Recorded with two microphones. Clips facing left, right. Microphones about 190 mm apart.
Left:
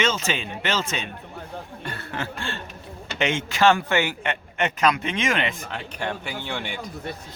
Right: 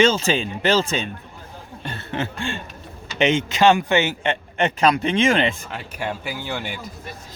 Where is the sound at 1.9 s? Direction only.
25° right (ahead or behind).